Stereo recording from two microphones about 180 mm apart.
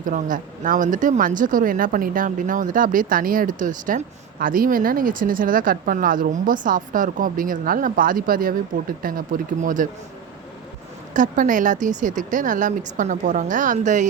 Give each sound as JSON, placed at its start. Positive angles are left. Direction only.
{"t": 0.0, "sound": "speech", "side_deg": -45}
{"t": 11.1, "sound": "speech", "side_deg": -45}